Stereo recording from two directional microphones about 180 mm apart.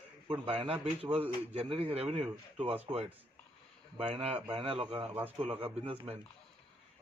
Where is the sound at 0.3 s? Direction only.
30° right (ahead or behind).